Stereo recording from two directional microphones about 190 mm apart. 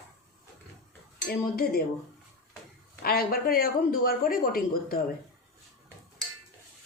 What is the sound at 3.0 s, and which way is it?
Speech, 55° left (ahead or behind).